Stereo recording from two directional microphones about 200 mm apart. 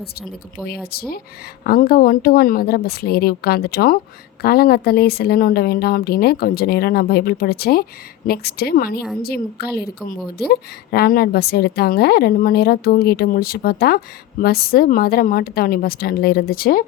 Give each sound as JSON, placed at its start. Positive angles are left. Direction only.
{"t": 0.0, "sound": "a woman's voice", "side_deg": 50}